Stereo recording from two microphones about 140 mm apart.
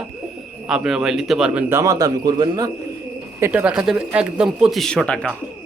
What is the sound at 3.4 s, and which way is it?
Speech, 10° right (ahead or behind).